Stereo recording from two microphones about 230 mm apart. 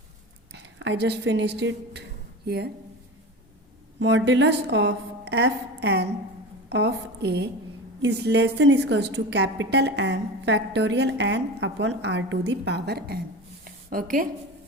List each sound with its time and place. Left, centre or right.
0.5 s speech: right
4.0 s a woman's voice: right
13.7 s a sound: right